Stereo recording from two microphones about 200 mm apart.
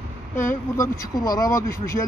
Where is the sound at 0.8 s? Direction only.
15° left (ahead or behind).